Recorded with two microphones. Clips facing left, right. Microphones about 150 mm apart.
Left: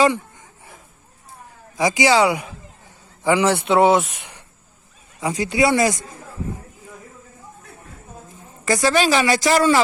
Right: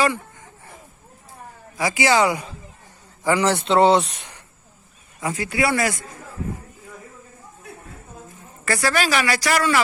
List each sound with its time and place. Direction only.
1.7 s speech: 20° left (ahead or behind)
5.2 s a woman's voice: 20° left (ahead or behind)
8.6 s a woman's voice: 20° left (ahead or behind)